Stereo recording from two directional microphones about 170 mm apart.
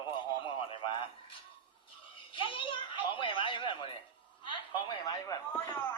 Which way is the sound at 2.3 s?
30° left (ahead or behind).